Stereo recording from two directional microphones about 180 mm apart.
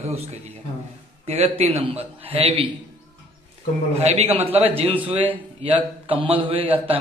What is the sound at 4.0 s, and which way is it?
A man's voice, 35° right (ahead or behind).